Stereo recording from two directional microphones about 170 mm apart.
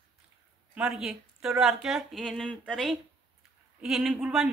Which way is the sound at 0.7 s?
5° right (ahead or behind).